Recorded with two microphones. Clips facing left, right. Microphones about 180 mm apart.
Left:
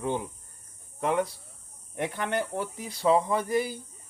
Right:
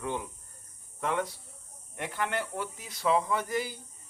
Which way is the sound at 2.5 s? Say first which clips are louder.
Left 4 dB; 35° left (ahead or behind).